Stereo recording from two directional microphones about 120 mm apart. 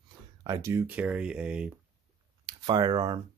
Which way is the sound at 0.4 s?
25° right (ahead or behind).